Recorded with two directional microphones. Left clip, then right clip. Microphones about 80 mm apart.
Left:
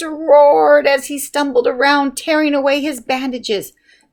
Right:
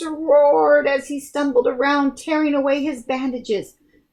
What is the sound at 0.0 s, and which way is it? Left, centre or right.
Speech, left.